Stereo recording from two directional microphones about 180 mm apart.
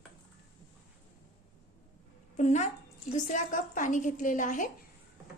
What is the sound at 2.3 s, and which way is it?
A woman's voice, 40° left (ahead or behind).